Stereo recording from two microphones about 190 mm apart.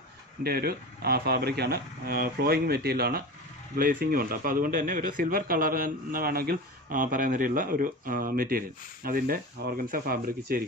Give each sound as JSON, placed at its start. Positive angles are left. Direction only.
{"t": 0.4, "sound": "a man's voice", "side_deg": -55}